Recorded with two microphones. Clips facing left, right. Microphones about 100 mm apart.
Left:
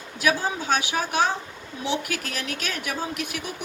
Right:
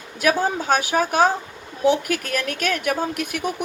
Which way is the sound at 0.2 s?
50° right (ahead or behind).